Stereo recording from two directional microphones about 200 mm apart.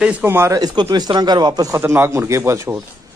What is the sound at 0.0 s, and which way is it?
Speech, 10° right (ahead or behind).